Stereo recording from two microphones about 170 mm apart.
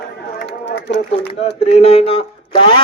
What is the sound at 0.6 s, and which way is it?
Run, 90° left.